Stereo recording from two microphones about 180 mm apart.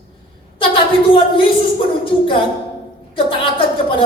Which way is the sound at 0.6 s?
30° left (ahead or behind).